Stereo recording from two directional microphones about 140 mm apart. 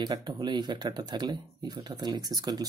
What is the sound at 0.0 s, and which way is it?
Speech, 25° right (ahead or behind).